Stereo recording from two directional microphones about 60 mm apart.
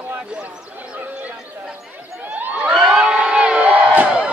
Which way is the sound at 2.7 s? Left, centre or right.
Centre.